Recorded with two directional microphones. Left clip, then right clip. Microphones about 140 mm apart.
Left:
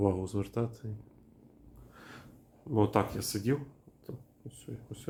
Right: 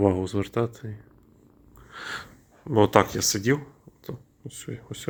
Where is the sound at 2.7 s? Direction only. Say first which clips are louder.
Right 10 dB; 35° right (ahead or behind).